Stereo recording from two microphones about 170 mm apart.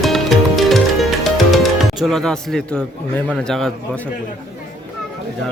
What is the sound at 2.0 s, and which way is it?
Speech, centre (ahead or behind).